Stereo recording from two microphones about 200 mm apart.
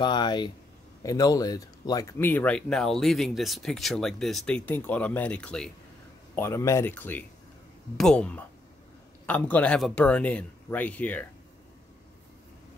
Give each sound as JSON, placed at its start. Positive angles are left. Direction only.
{"t": 0.0, "sound": "a man's voice", "side_deg": 20}